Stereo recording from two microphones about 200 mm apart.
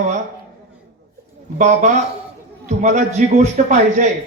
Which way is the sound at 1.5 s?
35° right (ahead or behind).